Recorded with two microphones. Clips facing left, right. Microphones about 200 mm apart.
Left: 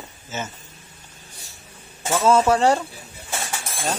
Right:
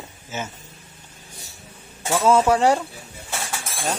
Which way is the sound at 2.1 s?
10° right (ahead or behind).